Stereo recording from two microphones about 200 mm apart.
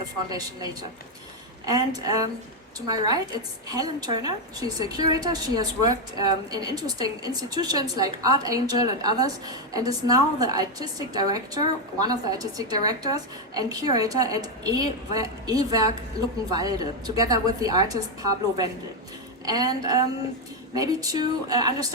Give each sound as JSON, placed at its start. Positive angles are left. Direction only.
{"t": 0.3, "sound": "a woman's voice", "side_deg": -20}
{"t": 19.5, "sound": "a woman's voice", "side_deg": -20}